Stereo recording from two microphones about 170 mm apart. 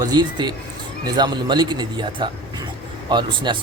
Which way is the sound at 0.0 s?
25° right (ahead or behind).